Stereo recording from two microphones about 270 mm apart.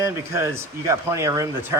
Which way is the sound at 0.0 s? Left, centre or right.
Centre.